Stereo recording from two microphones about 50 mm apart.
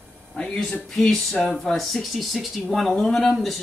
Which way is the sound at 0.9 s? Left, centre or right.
Centre.